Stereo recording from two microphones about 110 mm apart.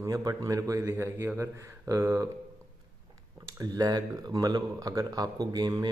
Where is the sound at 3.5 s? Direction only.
35° right (ahead or behind).